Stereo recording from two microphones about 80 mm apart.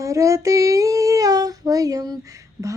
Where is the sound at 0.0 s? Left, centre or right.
Right.